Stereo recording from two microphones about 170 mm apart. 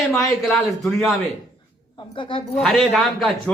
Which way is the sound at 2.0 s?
30° left (ahead or behind).